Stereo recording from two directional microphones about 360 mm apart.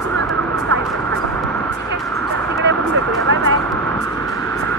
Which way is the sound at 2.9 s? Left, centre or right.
Right.